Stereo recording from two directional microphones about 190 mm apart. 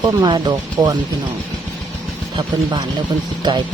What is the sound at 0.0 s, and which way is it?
Speech, 20° right (ahead or behind).